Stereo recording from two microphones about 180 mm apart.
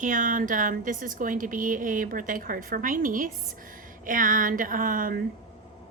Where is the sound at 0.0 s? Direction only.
45° right (ahead or behind).